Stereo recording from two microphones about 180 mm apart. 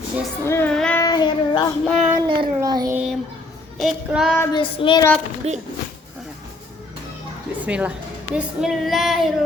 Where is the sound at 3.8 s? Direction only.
Centre (ahead or behind).